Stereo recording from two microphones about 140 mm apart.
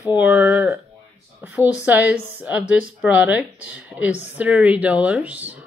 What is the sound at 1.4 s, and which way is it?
Speech, 10° right (ahead or behind).